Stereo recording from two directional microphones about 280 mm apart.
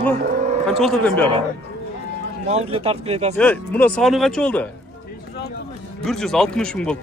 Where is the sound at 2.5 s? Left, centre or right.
Right.